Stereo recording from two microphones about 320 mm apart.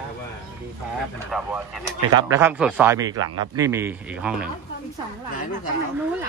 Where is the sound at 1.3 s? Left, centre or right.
Centre.